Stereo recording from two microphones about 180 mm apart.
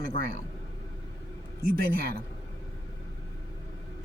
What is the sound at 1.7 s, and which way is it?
Speech, 55° right (ahead or behind).